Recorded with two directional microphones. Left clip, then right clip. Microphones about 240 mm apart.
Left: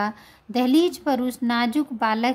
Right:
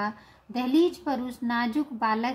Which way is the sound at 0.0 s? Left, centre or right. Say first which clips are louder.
Left 5 dB; left.